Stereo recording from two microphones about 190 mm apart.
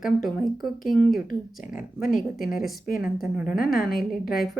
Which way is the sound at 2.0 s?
45° left (ahead or behind).